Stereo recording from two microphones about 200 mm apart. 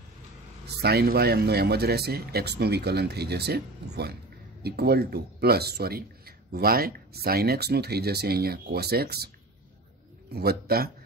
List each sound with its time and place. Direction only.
0.7 s speech: 50° right (ahead or behind)
10.3 s speech: 50° right (ahead or behind)